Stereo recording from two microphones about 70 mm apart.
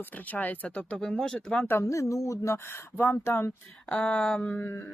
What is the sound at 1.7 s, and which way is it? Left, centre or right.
Speech, left.